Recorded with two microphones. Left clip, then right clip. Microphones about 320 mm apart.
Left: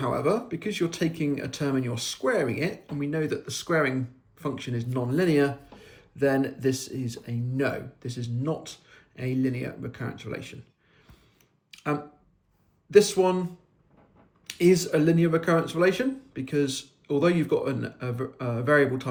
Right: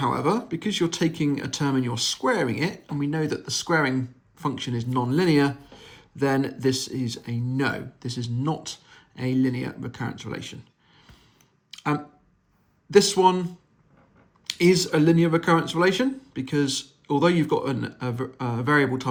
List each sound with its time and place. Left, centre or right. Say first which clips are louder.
0.0 s speech: right 2 dB; centre
12.9 s speech: right 2 dB; centre